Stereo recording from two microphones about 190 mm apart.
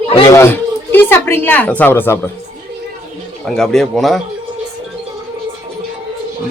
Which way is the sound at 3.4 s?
5° left (ahead or behind).